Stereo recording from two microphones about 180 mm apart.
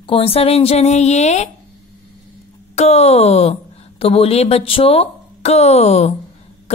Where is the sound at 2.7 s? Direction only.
35° left (ahead or behind).